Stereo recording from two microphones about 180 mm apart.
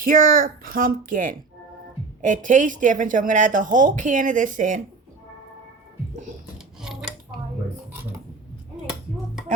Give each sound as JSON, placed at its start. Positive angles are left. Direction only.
{"t": 0.0, "sound": "speech", "side_deg": -50}